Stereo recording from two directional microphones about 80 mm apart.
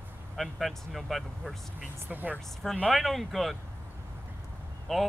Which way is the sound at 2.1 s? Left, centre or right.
Right.